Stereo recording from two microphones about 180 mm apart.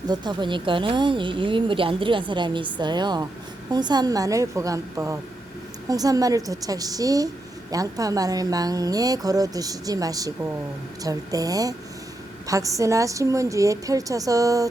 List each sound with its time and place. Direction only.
0.1 s a woman's voice: 25° right (ahead or behind)